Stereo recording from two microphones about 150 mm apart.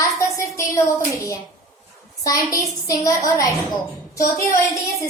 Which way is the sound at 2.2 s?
25° left (ahead or behind).